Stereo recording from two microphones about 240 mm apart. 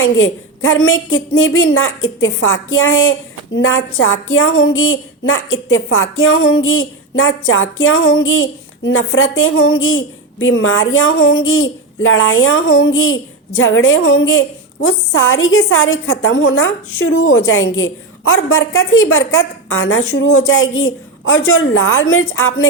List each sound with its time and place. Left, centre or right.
0.0 s speech: left